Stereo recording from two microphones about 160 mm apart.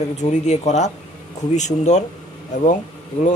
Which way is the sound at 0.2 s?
45° left (ahead or behind).